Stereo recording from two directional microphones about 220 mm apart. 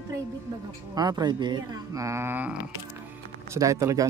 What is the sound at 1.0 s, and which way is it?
Speech, 15° right (ahead or behind).